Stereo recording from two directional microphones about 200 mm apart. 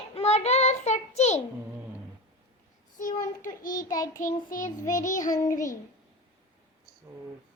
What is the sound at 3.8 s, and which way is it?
Speech, 15° left (ahead or behind).